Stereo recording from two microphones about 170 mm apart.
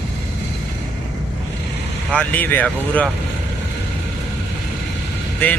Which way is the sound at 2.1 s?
10° left (ahead or behind).